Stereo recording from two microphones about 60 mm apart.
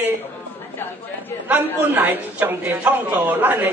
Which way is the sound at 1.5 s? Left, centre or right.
Right.